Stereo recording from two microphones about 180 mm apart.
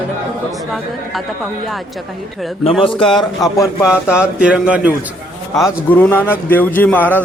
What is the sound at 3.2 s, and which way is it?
Speech, 20° left (ahead or behind).